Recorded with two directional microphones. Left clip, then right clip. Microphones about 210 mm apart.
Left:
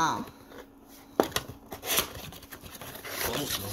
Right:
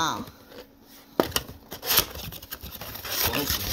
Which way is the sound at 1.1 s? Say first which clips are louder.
Right 2 dB; 20° right (ahead or behind).